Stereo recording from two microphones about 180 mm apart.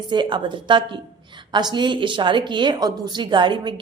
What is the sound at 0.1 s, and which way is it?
A woman's voice, 25° right (ahead or behind).